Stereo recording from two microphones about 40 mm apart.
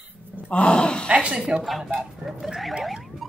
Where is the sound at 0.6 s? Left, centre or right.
Left.